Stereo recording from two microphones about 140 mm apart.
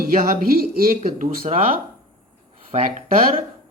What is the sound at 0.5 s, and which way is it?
Speech, 90° right.